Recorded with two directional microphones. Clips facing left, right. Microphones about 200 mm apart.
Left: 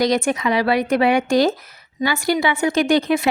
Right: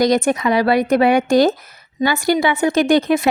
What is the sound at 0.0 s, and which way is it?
A woman's voice, 45° right (ahead or behind).